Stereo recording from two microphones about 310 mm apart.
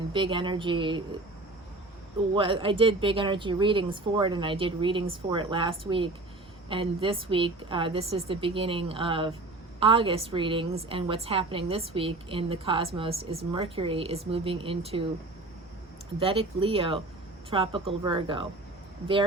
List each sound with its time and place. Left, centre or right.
0.1 s speech: centre
2.3 s speech: centre
16.2 s speech: centre